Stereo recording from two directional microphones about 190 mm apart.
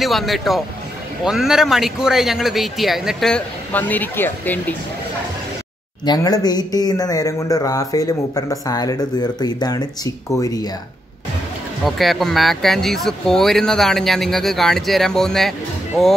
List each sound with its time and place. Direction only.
0.0 s speech: centre (ahead or behind)
6.0 s speech: 20° left (ahead or behind)
11.8 s speech: centre (ahead or behind)